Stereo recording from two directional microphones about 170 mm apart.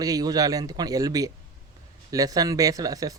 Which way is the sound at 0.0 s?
20° right (ahead or behind).